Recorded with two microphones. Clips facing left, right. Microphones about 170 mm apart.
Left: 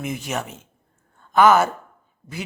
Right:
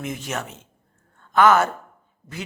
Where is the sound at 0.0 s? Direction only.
10° left (ahead or behind).